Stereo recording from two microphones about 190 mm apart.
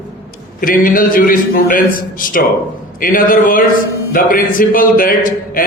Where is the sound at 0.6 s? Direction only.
45° left (ahead or behind).